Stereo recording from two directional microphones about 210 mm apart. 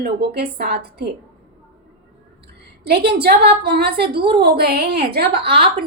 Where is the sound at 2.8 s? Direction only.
50° right (ahead or behind).